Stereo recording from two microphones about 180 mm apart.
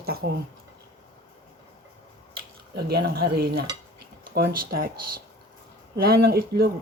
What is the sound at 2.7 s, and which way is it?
Speech, 60° right (ahead or behind).